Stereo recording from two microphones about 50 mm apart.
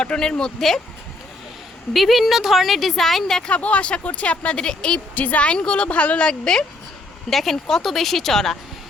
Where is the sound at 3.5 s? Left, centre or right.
Left.